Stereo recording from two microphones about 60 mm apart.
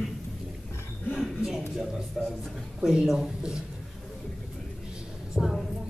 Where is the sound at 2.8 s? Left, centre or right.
Centre.